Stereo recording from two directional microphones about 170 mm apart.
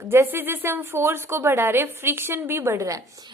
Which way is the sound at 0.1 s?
15° right (ahead or behind).